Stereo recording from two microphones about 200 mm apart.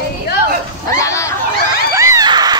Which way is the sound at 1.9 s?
15° right (ahead or behind).